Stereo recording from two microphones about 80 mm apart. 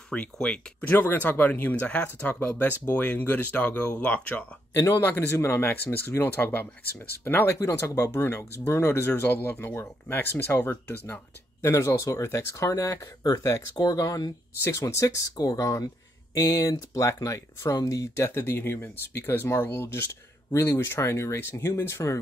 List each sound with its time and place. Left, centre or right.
0.1 s speech: centre
0.8 s speech: left
4.7 s speech: left
7.8 s speech: left
11.6 s speech: left